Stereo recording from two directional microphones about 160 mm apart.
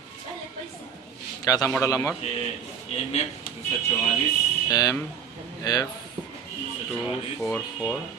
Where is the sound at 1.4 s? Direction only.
20° left (ahead or behind).